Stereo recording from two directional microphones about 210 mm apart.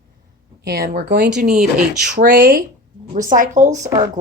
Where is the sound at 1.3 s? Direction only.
35° right (ahead or behind).